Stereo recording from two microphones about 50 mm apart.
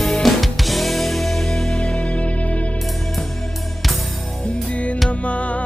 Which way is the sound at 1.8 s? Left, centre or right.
Left.